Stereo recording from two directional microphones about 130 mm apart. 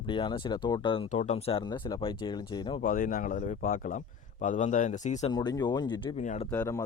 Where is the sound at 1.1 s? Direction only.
65° left (ahead or behind).